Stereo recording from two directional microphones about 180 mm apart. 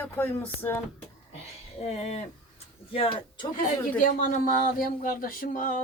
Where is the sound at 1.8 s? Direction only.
40° left (ahead or behind).